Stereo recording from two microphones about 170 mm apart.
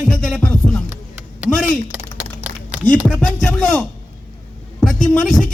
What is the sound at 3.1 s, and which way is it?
Speech, 5° left (ahead or behind).